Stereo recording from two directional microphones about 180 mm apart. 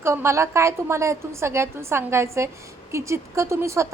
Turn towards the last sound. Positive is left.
turn(degrees=-15)  # may be behind; listen again after turning